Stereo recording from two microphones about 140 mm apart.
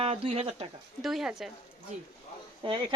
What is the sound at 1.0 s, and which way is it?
Speech, centre (ahead or behind).